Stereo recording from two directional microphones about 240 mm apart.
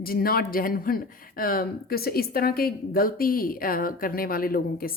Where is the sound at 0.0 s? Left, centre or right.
Left.